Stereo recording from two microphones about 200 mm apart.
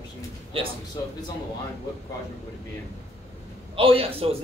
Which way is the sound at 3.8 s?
25° right (ahead or behind).